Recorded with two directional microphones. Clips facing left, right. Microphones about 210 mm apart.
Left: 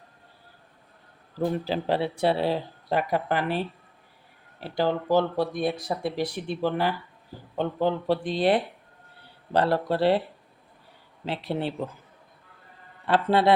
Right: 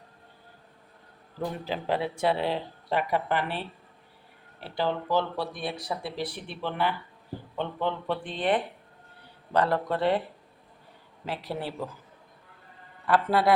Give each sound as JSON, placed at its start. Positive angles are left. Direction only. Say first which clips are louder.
{"t": 1.4, "sound": "speech", "louder": "left 6 dB", "side_deg": 35}
{"t": 11.3, "sound": "speech", "louder": "left 4 dB", "side_deg": 25}
{"t": 13.1, "sound": "speech", "louder": "left 2 dB", "side_deg": 25}